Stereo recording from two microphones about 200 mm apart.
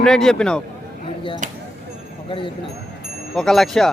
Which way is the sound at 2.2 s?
25° left (ahead or behind).